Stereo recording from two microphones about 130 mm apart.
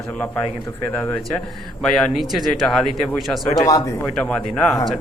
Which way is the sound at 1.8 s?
5° left (ahead or behind).